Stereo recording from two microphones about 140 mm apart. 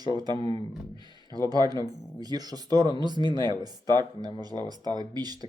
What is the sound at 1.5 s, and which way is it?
Speech, 30° right (ahead or behind).